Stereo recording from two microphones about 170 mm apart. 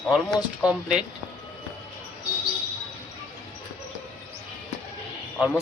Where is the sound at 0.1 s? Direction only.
5° right (ahead or behind).